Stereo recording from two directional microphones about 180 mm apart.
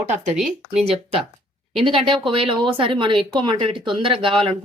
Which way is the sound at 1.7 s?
30° right (ahead or behind).